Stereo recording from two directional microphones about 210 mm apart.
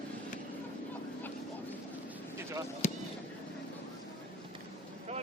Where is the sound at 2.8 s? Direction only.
35° left (ahead or behind).